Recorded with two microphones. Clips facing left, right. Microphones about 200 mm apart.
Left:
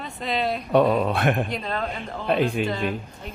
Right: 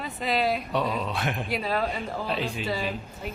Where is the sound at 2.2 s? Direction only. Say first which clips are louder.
Left 11 dB; 55° left (ahead or behind).